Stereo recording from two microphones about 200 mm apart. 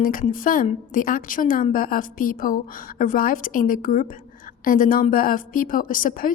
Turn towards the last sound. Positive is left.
turn(degrees=45)  # may be behind; listen again after turning